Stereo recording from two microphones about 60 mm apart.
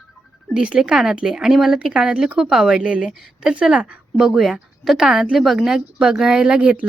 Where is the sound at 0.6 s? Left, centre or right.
Centre.